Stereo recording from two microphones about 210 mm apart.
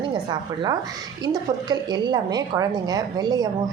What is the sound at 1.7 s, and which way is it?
A woman's voice, 20° right (ahead or behind).